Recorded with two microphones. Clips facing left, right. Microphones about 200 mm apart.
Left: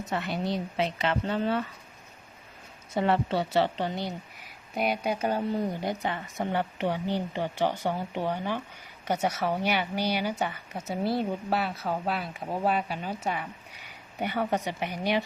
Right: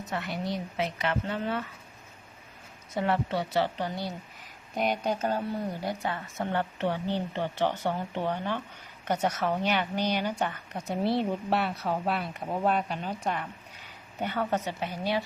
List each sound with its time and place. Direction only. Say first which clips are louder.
0.1 s a woman's voice: left 2 dB; 30° left (ahead or behind)
2.9 s a woman's voice: left 2 dB; 30° left (ahead or behind)
4.7 s speech: even; 5° left (ahead or behind)